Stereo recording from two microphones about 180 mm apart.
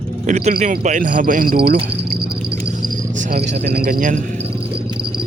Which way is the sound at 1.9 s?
65° right (ahead or behind).